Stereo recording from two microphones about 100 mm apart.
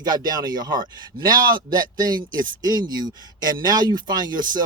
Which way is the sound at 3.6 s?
45° right (ahead or behind).